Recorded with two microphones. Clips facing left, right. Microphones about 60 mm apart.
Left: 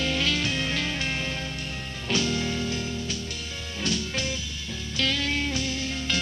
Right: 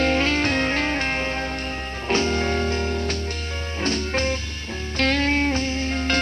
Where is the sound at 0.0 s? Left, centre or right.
Right.